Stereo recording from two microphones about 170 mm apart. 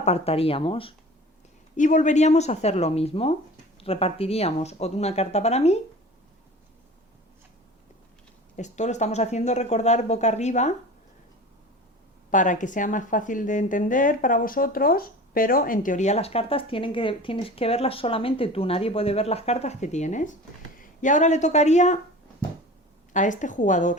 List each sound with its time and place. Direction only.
0.0 s speech: 35° left (ahead or behind)
1.7 s speech: 50° left (ahead or behind)
8.5 s speech: 45° left (ahead or behind)
12.3 s speech: 50° left (ahead or behind)
23.1 s speech: 45° left (ahead or behind)